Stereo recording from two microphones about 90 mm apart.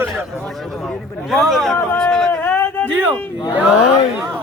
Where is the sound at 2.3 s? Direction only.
20° left (ahead or behind).